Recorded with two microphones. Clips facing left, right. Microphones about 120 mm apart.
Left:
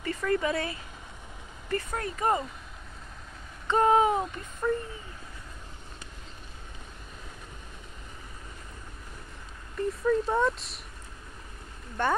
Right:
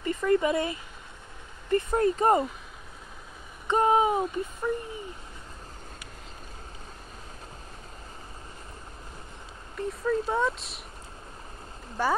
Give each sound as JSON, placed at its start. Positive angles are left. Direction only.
{"t": 0.0, "sound": "speech", "side_deg": -20}
{"t": 3.6, "sound": "a sound", "side_deg": -15}
{"t": 9.8, "sound": "speech", "side_deg": 0}
{"t": 12.0, "sound": "speech", "side_deg": -5}